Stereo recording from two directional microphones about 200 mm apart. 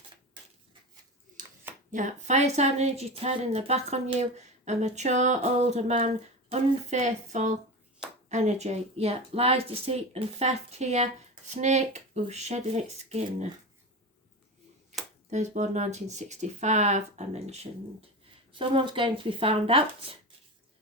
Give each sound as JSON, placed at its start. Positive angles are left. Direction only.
{"t": 1.4, "sound": "a sound", "side_deg": -40}
{"t": 1.9, "sound": "a woman's voice", "side_deg": -40}
{"t": 15.3, "sound": "a woman's voice", "side_deg": -35}